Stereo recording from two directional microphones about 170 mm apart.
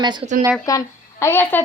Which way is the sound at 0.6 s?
20° left (ahead or behind).